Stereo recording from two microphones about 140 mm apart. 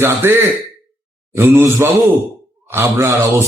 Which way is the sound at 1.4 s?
15° right (ahead or behind).